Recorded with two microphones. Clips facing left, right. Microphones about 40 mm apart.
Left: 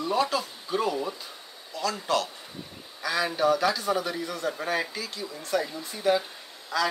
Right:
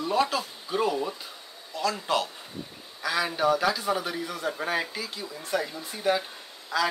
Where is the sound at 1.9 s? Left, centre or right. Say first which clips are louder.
Left 2 dB; right.